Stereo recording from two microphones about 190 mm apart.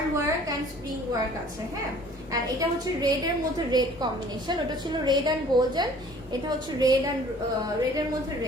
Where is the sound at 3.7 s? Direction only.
20° right (ahead or behind).